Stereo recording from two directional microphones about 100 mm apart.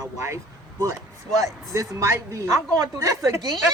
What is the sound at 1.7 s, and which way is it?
A woman's voice, 35° right (ahead or behind).